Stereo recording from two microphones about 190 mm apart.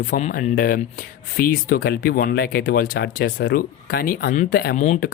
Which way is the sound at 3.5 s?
50° left (ahead or behind).